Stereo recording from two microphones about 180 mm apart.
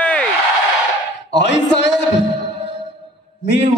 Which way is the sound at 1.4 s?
75° left (ahead or behind).